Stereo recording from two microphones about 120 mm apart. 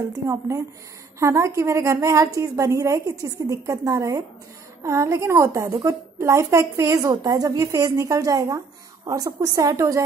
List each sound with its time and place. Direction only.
0.1 s a woman's voice: 25° right (ahead or behind)